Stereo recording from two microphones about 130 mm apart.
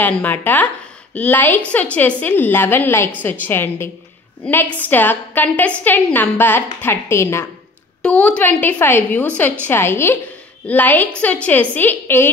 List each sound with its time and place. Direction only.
0.0 s a woman's voice: 15° left (ahead or behind)